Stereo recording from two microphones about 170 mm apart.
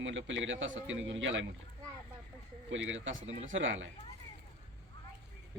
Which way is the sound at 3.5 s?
90° right.